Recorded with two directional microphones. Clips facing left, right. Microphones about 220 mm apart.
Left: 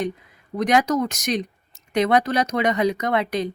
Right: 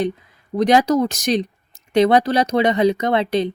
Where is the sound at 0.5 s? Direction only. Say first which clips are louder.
Right 4 dB; 30° right (ahead or behind).